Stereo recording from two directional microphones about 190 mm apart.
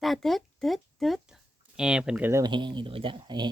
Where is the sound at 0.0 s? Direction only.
Centre (ahead or behind).